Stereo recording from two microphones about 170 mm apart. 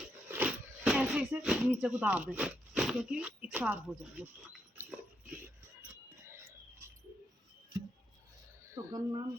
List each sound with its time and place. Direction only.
0.3 s speech: 10° right (ahead or behind)
4.8 s dog: 10° right (ahead or behind)
6.2 s a sound: 15° right (ahead or behind)
8.7 s speech: 20° right (ahead or behind)